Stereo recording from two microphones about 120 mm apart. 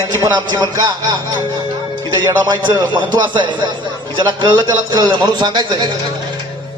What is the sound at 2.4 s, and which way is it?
A man's voice, 35° right (ahead or behind).